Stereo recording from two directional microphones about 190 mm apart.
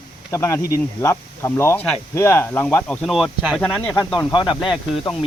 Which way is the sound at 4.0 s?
25° left (ahead or behind).